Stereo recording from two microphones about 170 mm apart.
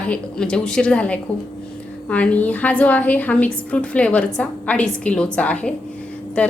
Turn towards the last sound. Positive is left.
turn(degrees=5)  # may be behind; listen again after turning